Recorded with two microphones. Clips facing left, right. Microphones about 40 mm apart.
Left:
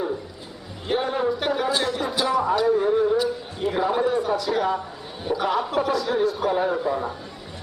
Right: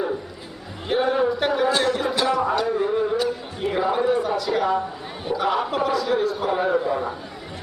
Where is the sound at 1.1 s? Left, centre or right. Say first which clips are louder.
Right 2 dB; centre.